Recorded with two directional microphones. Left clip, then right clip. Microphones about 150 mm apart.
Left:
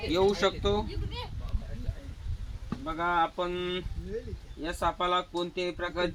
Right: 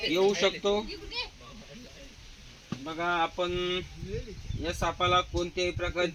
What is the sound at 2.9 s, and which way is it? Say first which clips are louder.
Speech: left 1 dB; 30° right (ahead or behind).